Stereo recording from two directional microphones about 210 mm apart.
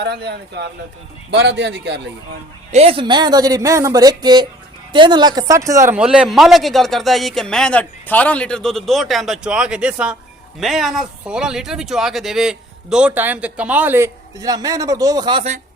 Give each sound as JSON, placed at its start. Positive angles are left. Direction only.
{"t": 0.0, "sound": "a man's voice", "side_deg": -50}
{"t": 2.7, "sound": "speech", "side_deg": -25}